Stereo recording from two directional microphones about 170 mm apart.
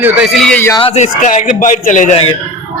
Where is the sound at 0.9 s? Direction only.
45° left (ahead or behind).